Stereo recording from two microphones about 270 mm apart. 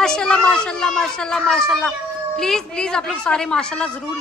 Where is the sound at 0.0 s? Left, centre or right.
Centre.